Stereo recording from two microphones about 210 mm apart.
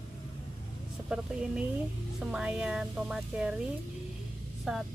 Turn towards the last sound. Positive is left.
turn(degrees=0)  # may be behind; listen again after turning